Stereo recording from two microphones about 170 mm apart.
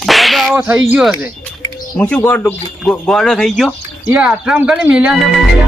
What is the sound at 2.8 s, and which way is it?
Speech, 5° left (ahead or behind).